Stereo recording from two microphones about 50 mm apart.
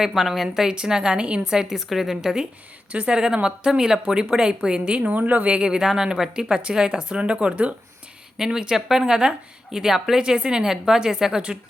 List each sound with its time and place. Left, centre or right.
0.0 s a woman's voice: centre; by 1.5 s right
1.5 s a woman's voice: centre
2.9 s speech: right
3.2 s a woman's voice: centre
8.4 s a woman's voice: centre